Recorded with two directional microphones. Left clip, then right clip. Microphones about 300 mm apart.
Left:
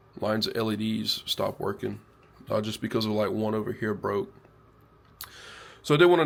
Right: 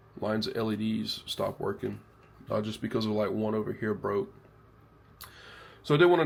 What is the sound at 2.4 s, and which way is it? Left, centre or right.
Speech, centre.